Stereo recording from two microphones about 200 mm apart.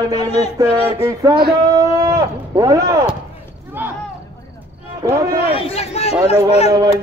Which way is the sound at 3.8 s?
10° right (ahead or behind).